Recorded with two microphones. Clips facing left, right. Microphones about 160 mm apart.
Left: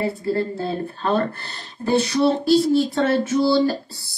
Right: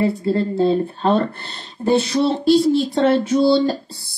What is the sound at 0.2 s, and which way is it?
Speech, 25° right (ahead or behind).